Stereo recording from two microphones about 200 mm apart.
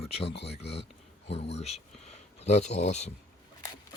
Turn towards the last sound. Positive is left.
turn(degrees=35)  # may be behind; listen again after turning